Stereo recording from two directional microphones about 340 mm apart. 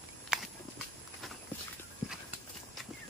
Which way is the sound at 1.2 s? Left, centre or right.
Centre.